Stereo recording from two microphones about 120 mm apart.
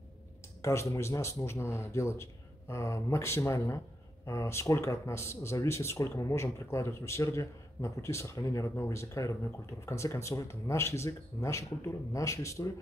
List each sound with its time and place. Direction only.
0.6 s speech: 25° left (ahead or behind)